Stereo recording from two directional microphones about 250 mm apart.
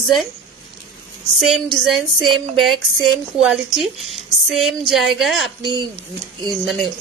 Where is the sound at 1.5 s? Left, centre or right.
Centre.